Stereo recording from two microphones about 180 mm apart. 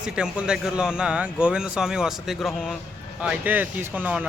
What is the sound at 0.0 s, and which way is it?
A man's voice, 5° right (ahead or behind).